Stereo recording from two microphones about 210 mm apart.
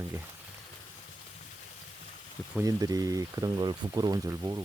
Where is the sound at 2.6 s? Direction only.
15° right (ahead or behind).